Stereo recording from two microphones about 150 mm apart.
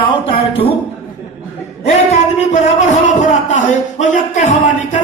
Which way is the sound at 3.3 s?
55° left (ahead or behind).